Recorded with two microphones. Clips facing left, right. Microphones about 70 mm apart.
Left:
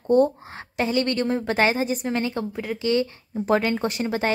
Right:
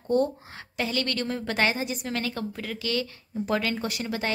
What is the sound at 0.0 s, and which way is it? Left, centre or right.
A woman's voice, left.